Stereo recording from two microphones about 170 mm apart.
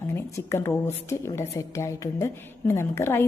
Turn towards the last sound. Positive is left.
turn(degrees=15)  # may be behind; listen again after turning